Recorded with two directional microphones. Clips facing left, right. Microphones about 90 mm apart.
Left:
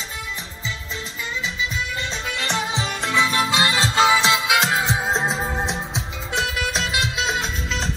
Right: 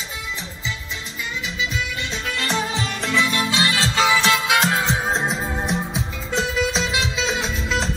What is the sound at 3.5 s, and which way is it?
Music, 35° left (ahead or behind).